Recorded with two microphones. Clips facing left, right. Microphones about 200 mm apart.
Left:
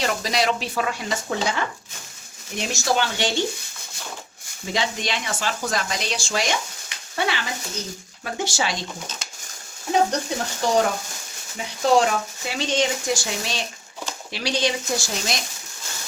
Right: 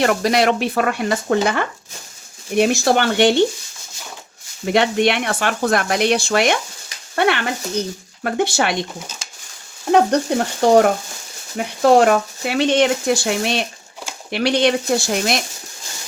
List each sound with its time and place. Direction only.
0.0 s speech: 60° right (ahead or behind)
4.6 s speech: 65° right (ahead or behind)
9.9 s speech: 60° right (ahead or behind)